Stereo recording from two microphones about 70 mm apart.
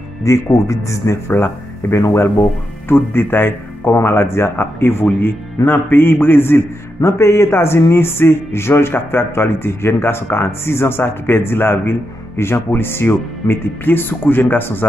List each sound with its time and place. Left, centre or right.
0.2 s speech: left
2.9 s speech: left
7.0 s speech: left